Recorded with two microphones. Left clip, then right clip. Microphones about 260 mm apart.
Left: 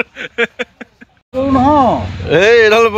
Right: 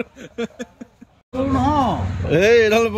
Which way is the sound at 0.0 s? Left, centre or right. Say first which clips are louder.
Left 11 dB; centre.